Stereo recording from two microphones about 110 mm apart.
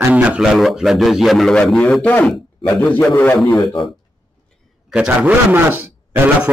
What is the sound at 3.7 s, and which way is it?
A man's voice, centre (ahead or behind).